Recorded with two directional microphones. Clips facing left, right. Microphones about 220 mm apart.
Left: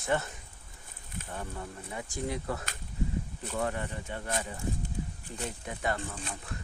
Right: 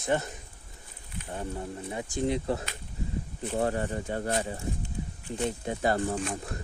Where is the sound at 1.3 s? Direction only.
25° right (ahead or behind).